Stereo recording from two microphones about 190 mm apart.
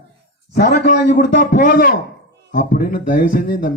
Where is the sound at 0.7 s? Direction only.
45° left (ahead or behind).